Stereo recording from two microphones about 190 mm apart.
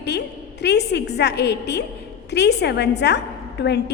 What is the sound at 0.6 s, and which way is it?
A woman's voice, 60° left (ahead or behind).